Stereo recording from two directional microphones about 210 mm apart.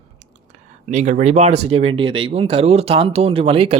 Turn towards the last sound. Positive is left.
turn(degrees=-25)  # may be behind; listen again after turning